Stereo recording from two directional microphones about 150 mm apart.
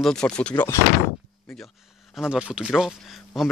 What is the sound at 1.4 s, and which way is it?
Speech, 5° left (ahead or behind).